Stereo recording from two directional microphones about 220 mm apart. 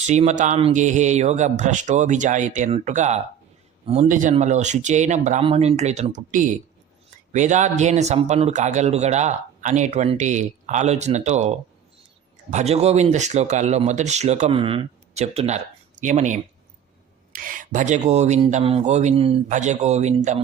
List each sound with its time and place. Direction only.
0.1 s speech: 30° right (ahead or behind)